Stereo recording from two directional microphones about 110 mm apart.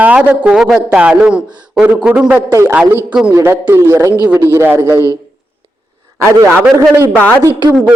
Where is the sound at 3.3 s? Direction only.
25° right (ahead or behind).